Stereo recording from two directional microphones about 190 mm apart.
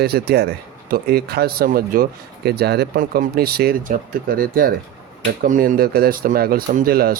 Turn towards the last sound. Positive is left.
turn(degrees=-50)  # may be behind; listen again after turning